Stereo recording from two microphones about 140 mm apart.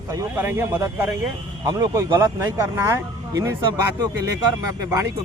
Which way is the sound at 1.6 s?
25° right (ahead or behind).